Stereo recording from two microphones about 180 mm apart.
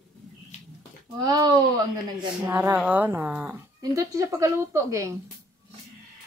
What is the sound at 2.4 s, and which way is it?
Speech, 10° right (ahead or behind).